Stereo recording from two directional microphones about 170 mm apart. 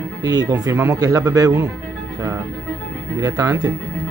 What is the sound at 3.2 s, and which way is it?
Speech, 20° right (ahead or behind).